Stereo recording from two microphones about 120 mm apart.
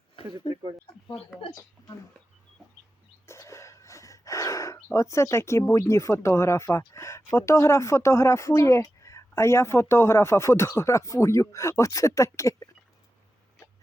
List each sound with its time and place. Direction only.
0.4 s speech: 45° left (ahead or behind)
3.2 s gasp: 25° left (ahead or behind)
5.7 s speech: 25° left (ahead or behind)